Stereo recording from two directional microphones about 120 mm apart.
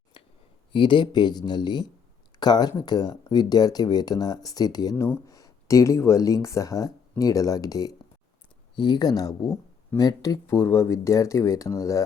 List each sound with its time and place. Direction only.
0.7 s speech: 40° left (ahead or behind); by 12.0 s 25° left (ahead or behind)